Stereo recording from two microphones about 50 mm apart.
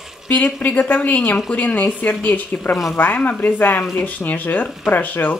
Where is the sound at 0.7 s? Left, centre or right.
Left.